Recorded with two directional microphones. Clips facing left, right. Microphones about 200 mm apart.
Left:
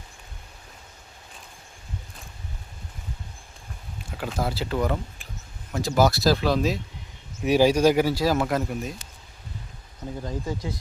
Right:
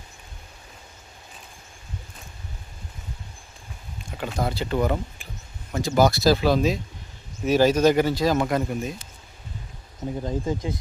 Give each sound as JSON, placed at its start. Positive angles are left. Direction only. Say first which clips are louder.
{"t": 4.2, "sound": "speech", "louder": "right 1 dB", "side_deg": 5}
{"t": 7.4, "sound": "speech", "louder": "even", "side_deg": 10}
{"t": 10.0, "sound": "speech", "louder": "right 4 dB", "side_deg": -25}